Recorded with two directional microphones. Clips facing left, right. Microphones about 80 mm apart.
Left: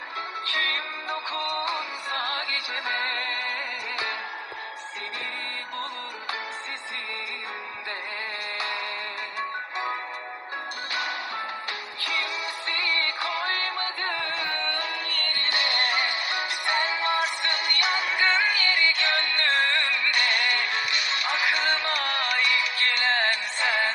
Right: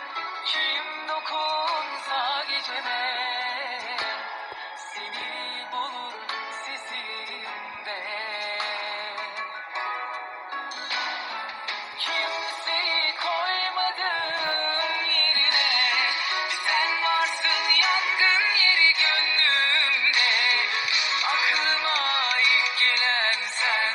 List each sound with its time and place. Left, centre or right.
0.6 s music: right
12.0 s music: right
15.7 s music: left